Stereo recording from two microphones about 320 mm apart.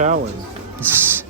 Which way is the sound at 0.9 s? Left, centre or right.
Centre.